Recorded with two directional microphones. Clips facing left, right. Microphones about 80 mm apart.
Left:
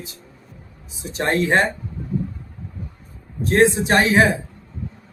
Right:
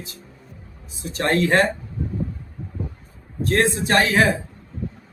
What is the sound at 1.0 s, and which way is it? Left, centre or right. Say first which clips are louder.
Speech: even; left.